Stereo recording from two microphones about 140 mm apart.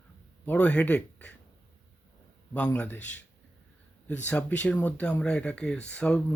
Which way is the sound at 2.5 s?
10° left (ahead or behind).